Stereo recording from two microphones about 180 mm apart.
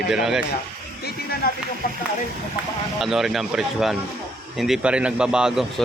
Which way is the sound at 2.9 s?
Centre (ahead or behind).